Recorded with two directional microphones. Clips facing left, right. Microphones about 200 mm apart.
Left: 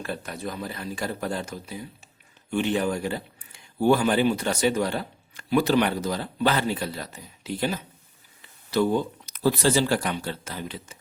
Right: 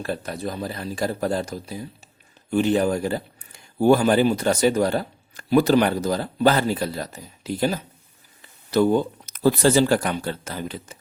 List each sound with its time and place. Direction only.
0.0 s speech: 35° right (ahead or behind)